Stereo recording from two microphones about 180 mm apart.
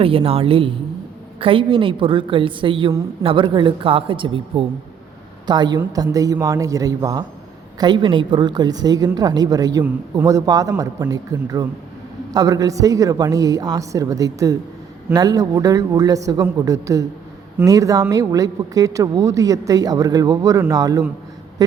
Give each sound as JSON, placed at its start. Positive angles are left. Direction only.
{"t": 0.0, "sound": "a woman's voice", "side_deg": -30}